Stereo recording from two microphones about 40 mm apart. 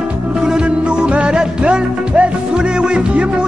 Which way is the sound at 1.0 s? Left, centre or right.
Right.